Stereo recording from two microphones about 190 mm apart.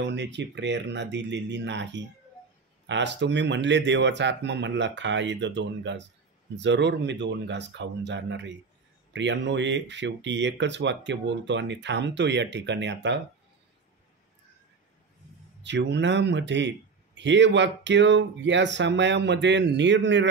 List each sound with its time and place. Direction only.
0.0 s a man's voice: 65° right (ahead or behind)
15.6 s a man's voice: 70° right (ahead or behind)